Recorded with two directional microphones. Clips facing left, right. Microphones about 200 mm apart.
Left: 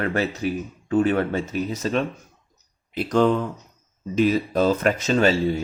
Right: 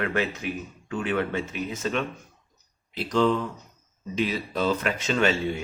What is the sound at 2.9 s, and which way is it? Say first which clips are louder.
Speech: left 4 dB; 55° left (ahead or behind).